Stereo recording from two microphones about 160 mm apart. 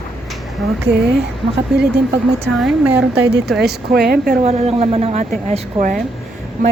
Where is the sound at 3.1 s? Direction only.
90° right.